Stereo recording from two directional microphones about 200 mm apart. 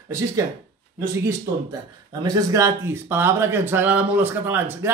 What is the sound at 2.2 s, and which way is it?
Speech, 15° right (ahead or behind).